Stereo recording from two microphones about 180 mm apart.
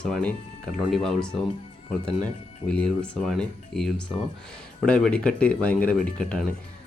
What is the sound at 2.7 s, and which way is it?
Speech, 5° left (ahead or behind).